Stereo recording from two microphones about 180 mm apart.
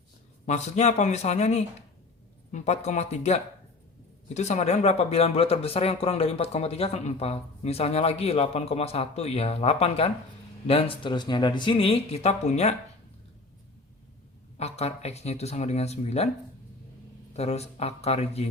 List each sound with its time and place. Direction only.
0.4 s speech: 40° left (ahead or behind)
14.6 s speech: 35° left (ahead or behind)
17.3 s speech: 35° left (ahead or behind)